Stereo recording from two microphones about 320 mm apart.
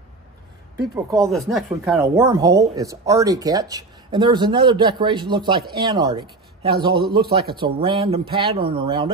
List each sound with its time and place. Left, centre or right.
0.9 s speech: centre
1.3 s speech: centre
6.9 s a man's voice: right
7.2 s speech: centre